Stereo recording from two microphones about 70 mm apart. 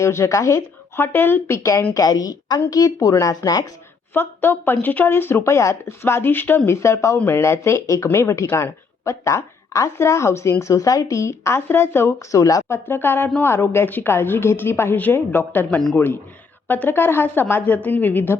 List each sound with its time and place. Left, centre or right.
0.0 s speech: left
0.9 s speech: left
1.9 s speech: left
4.1 s speech: left
6.7 s speech: left
10.6 s speech: left
12.4 s speech: left
12.6 s speech: left
15.7 s speech: centre
16.0 s a woman's voice: left